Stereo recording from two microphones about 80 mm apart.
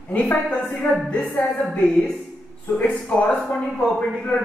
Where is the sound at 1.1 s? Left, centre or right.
Centre.